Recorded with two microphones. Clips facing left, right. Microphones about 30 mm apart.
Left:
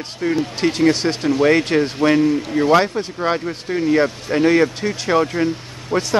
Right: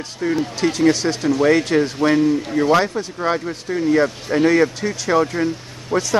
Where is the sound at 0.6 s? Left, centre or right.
Left.